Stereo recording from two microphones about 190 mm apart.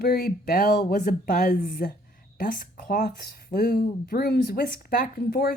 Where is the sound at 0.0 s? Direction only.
50° left (ahead or behind).